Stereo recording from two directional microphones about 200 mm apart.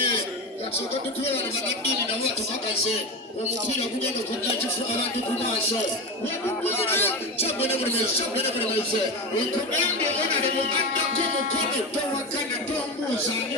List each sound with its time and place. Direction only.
7.0 s speech: 30° left (ahead or behind)